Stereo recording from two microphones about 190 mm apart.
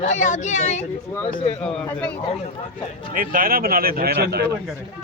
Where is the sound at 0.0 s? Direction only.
40° left (ahead or behind).